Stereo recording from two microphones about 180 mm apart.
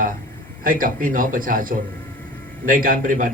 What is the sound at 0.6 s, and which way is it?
A man's voice, 50° right (ahead or behind).